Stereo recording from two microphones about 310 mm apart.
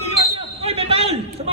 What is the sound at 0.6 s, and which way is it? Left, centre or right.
Basketball bounce, centre.